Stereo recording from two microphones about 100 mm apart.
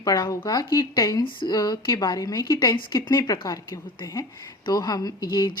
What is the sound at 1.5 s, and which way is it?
Speech, 40° left (ahead or behind).